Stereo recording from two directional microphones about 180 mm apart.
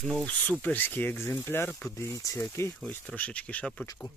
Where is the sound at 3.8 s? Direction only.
20° left (ahead or behind).